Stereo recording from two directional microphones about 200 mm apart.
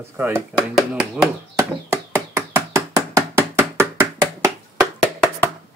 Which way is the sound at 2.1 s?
15° right (ahead or behind).